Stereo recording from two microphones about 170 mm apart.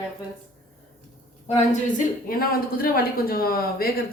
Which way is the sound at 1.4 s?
45° left (ahead or behind).